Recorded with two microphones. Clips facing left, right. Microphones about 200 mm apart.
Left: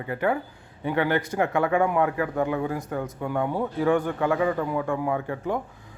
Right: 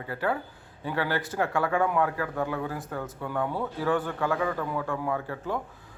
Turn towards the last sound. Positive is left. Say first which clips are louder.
# left 4 dB
turn(degrees=15)  # may be behind; listen again after turning